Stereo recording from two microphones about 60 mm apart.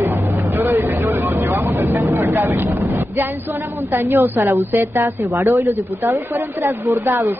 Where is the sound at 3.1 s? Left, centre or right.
Right.